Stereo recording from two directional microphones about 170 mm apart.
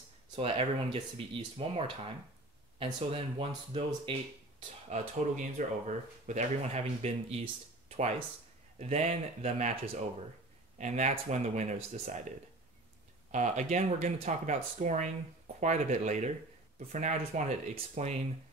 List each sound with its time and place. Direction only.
0.4 s speech: 35° right (ahead or behind)
4.8 s speech: 45° right (ahead or behind)
8.7 s speech: 40° right (ahead or behind)
10.8 s speech: 45° right (ahead or behind)